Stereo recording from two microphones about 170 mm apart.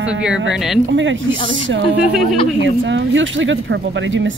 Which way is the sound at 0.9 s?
90° right.